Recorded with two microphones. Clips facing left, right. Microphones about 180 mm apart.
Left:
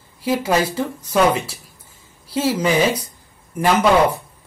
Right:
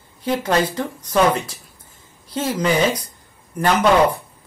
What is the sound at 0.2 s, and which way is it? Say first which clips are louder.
Speech: left 1 dB; 10° left (ahead or behind).